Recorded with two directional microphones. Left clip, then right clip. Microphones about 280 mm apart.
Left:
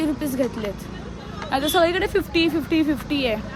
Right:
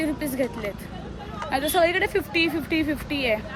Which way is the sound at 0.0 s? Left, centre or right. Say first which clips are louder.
Left 3 dB; centre.